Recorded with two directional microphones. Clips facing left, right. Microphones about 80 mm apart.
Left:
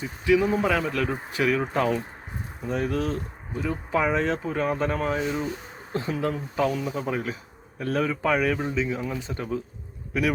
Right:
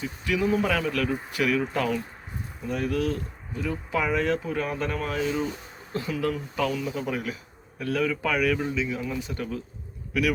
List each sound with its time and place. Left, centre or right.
0.3 s speech: left